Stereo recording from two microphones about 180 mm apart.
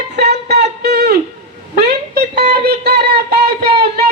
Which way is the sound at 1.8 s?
60° right (ahead or behind).